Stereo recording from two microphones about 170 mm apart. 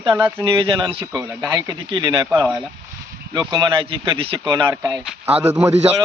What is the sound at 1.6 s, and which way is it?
Speech, 25° right (ahead or behind).